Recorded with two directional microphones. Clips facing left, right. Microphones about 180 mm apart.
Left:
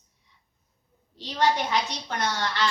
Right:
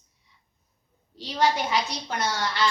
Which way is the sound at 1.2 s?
10° right (ahead or behind).